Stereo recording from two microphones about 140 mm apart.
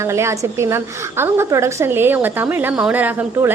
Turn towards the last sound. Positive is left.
turn(degrees=-10)  # may be behind; listen again after turning